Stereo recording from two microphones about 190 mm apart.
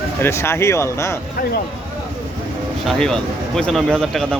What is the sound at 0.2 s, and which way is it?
Speech, 15° left (ahead or behind).